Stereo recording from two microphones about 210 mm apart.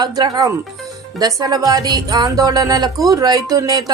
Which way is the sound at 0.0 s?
20° right (ahead or behind).